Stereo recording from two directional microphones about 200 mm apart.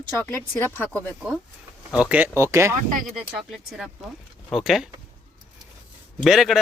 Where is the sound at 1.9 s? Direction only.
5° right (ahead or behind).